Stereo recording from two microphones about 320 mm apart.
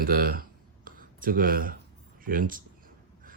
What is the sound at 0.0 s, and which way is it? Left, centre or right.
Speech, right.